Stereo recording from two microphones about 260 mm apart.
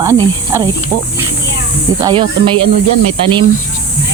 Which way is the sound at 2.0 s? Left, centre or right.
Centre.